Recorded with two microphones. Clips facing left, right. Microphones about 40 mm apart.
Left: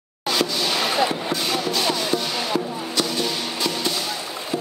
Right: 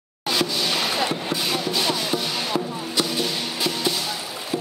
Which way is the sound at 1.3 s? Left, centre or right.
Centre.